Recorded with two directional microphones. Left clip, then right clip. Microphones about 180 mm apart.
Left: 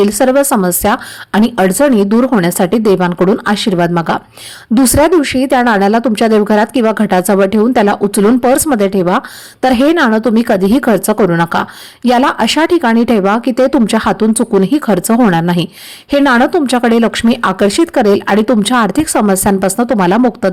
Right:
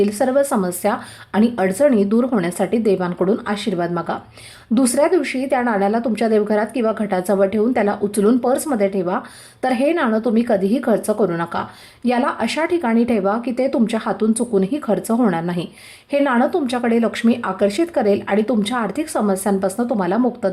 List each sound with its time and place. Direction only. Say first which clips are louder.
0.0 s speech: left 7 dB; 35° left (ahead or behind)